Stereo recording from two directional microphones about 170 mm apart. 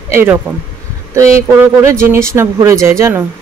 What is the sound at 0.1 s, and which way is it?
Speech, 15° right (ahead or behind).